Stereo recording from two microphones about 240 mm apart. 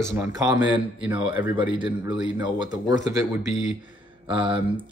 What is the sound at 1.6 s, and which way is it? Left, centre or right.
A man's voice, centre.